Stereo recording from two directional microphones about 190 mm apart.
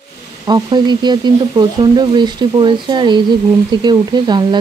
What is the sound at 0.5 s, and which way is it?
Speech, 20° right (ahead or behind).